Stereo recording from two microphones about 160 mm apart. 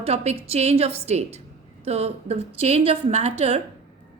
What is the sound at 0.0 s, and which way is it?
A woman's voice, 40° right (ahead or behind).